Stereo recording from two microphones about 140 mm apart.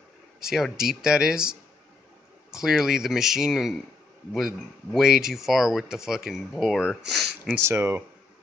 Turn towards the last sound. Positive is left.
turn(degrees=-20)  # may be behind; listen again after turning